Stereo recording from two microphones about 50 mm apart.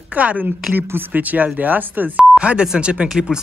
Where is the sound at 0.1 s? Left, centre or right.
Right.